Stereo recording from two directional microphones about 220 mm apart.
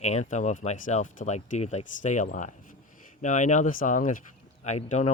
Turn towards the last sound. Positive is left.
turn(degrees=30)  # may be behind; listen again after turning